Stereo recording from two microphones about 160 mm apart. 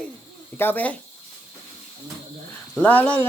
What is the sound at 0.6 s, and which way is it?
Speech, 10° left (ahead or behind).